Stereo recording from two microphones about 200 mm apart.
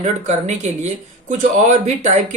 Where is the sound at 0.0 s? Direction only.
35° right (ahead or behind).